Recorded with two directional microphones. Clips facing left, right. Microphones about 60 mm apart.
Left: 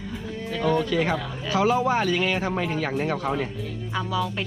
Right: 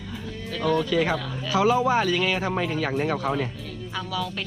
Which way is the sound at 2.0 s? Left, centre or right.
Left.